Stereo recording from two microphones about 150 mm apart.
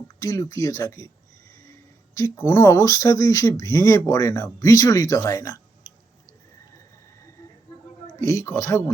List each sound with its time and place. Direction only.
0.2 s speech: 20° left (ahead or behind)
2.1 s speech: 20° left (ahead or behind)
8.0 s speech: 20° left (ahead or behind)